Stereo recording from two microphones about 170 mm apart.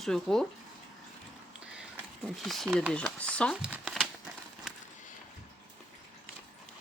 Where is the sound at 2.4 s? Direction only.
Centre (ahead or behind).